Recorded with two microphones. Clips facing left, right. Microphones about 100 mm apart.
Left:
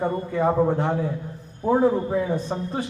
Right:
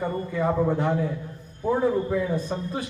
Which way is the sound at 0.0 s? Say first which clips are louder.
Left 3 dB; 30° left (ahead or behind).